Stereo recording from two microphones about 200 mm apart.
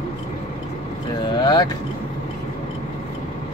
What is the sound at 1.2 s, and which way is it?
Vehicle, 20° left (ahead or behind).